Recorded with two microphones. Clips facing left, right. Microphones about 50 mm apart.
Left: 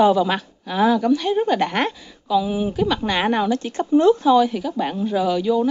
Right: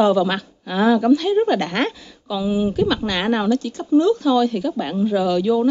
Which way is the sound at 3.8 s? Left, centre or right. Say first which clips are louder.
Left 2 dB; left.